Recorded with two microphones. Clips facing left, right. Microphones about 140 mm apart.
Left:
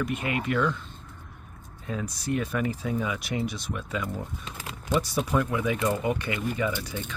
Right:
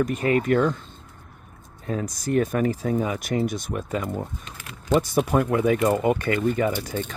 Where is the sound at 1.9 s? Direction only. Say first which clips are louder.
Right 4 dB; 45° right (ahead or behind).